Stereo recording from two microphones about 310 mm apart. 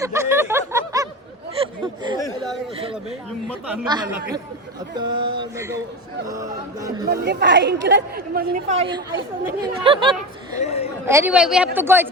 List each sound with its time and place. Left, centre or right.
0.0 s snicker: centre
3.8 s speech: centre
7.1 s a woman's voice: right; by 10.1 s centre
10.6 s a woman's voice: centre
11.0 s speech: centre